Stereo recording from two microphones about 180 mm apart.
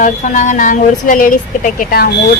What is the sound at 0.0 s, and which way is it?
Speech, 40° left (ahead or behind).